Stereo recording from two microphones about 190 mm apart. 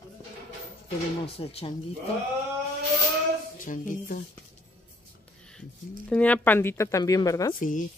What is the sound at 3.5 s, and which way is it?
Speech, 45° left (ahead or behind).